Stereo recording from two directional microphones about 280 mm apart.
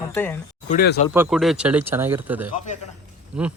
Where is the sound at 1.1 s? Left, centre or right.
Centre.